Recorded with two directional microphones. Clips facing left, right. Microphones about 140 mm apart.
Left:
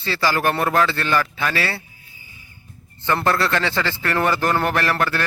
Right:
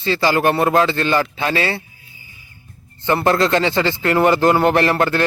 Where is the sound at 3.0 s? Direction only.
20° right (ahead or behind).